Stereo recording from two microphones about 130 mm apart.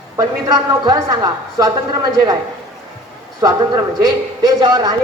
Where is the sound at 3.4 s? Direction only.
30° right (ahead or behind).